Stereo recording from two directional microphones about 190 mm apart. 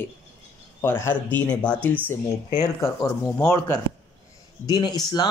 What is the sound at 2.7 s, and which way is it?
Speech, 15° left (ahead or behind).